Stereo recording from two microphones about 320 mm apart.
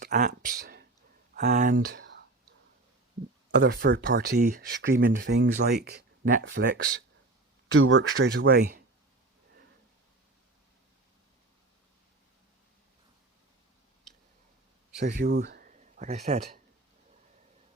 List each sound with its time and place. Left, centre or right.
0.0 s a sound: right
1.3 s speech: right
3.5 s speech: right
7.8 s speech: right
14.9 s speech: right